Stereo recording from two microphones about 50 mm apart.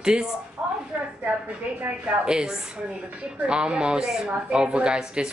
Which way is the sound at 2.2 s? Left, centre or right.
Centre.